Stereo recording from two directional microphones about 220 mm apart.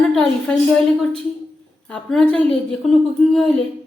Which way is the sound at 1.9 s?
5° left (ahead or behind).